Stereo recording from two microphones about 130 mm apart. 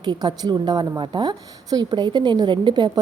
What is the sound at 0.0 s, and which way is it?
A woman's voice, 35° right (ahead or behind).